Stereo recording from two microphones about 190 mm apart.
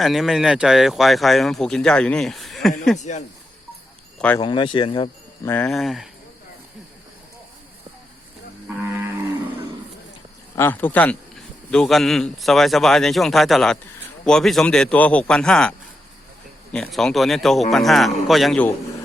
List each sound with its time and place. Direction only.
0.0 s a man's voice: centre (ahead or behind)
3.0 s speech: 40° left (ahead or behind)
4.4 s speech: 25° left (ahead or behind)
5.5 s a man's voice: 5° left (ahead or behind)
10.5 s a man's voice: 10° left (ahead or behind)
16.7 s a man's voice: 5° left (ahead or behind)